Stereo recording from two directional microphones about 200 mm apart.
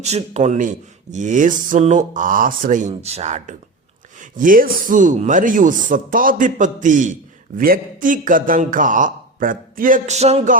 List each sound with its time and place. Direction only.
0.0 s speech: 35° right (ahead or behind)